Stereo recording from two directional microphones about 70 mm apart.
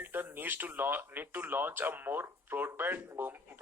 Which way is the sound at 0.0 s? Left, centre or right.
Right.